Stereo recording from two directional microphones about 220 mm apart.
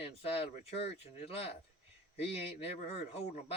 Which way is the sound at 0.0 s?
25° left (ahead or behind).